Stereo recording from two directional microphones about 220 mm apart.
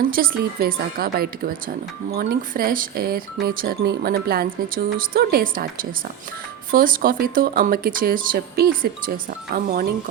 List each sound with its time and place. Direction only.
0.1 s speech: 40° right (ahead or behind)
6.7 s speech: 40° right (ahead or behind)